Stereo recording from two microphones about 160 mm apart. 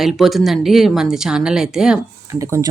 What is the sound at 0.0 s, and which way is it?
Speech, centre (ahead or behind).